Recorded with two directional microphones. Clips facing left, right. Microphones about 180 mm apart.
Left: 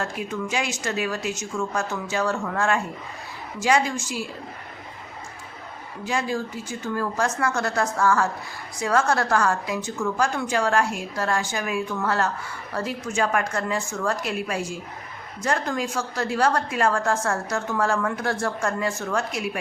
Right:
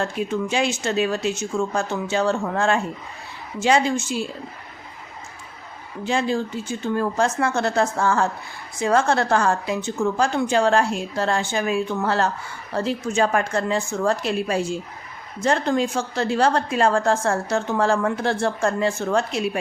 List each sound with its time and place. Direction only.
0.0 s a woman's voice: 30° right (ahead or behind)
6.1 s a woman's voice: 25° right (ahead or behind)